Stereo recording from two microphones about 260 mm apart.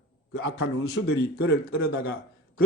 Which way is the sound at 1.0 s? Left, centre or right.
Left.